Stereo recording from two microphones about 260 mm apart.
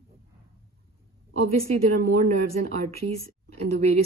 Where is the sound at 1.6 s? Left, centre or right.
Right.